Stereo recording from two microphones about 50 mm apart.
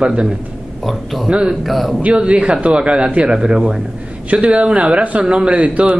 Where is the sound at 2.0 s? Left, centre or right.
Right.